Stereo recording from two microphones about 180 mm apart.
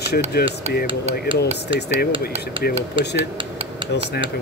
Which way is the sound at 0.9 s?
35° right (ahead or behind).